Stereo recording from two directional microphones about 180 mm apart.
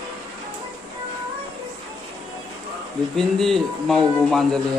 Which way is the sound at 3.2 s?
Centre (ahead or behind).